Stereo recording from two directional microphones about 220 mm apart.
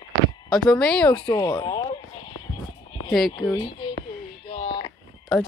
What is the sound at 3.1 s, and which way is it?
Speech, centre (ahead or behind).